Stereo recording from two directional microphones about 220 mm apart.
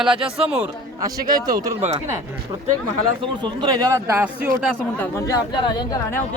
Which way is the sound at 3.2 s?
20° right (ahead or behind).